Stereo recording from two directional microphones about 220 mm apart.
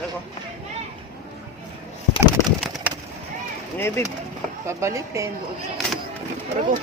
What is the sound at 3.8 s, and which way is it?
Speech, 10° left (ahead or behind).